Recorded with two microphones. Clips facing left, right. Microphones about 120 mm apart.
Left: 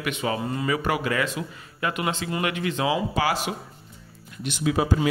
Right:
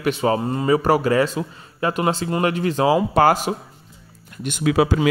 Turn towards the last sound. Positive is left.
turn(degrees=-85)